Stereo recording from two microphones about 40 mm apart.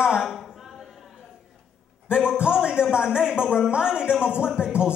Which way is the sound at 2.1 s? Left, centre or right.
Right.